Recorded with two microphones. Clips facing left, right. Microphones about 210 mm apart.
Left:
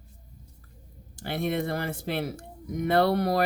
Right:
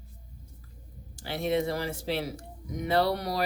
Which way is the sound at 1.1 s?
55° left (ahead or behind).